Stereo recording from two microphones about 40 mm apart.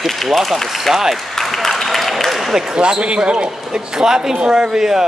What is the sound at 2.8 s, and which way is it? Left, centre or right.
Speech, right.